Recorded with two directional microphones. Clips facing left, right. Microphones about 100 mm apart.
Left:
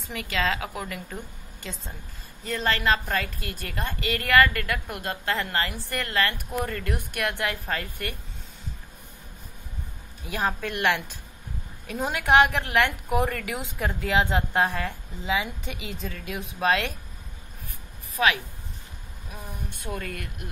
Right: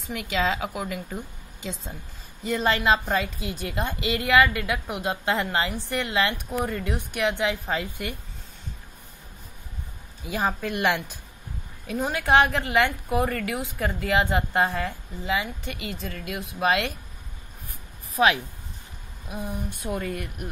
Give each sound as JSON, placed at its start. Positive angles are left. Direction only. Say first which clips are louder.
{"t": 0.1, "sound": "a woman's voice", "louder": "right 2 dB", "side_deg": -10}
{"t": 10.2, "sound": "a woman's voice", "louder": "right 1 dB", "side_deg": -10}
{"t": 18.1, "sound": "speech", "louder": "right 3 dB", "side_deg": -30}
{"t": 19.3, "sound": "speech", "louder": "right 7 dB", "side_deg": -20}